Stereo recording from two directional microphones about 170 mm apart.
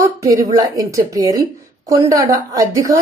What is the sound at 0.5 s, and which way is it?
A woman's voice, 20° right (ahead or behind).